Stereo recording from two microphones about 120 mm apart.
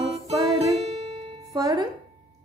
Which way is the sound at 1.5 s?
30° right (ahead or behind).